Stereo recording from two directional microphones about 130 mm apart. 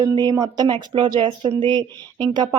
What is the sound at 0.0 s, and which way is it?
A woman's voice, 30° right (ahead or behind).